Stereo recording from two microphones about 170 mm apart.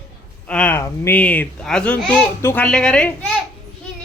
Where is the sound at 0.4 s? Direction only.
5° left (ahead or behind).